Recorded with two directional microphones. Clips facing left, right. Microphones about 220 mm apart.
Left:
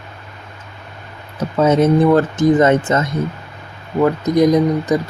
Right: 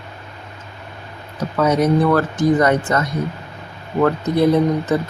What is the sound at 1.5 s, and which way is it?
Speech, 25° left (ahead or behind).